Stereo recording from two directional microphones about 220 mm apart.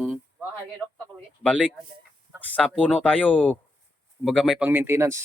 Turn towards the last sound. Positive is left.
turn(degrees=-10)  # may be behind; listen again after turning